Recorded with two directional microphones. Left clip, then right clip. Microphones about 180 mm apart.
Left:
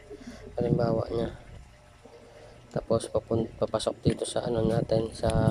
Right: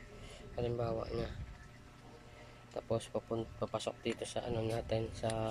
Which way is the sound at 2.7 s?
20° left (ahead or behind).